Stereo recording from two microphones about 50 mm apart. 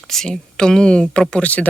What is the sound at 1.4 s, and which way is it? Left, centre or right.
Speech, left.